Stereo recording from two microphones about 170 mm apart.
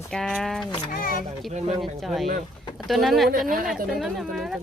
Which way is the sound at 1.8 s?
Centre (ahead or behind).